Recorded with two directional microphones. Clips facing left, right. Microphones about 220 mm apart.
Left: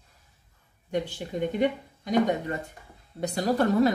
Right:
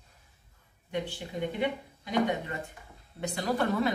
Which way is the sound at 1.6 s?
40° left (ahead or behind).